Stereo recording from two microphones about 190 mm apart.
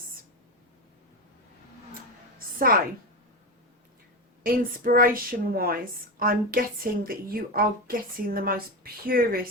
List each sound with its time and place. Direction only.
4.4 s a woman's voice: 45° right (ahead or behind)